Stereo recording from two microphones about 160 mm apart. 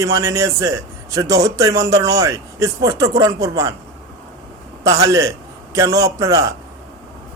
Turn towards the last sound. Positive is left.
turn(degrees=-20)  # may be behind; listen again after turning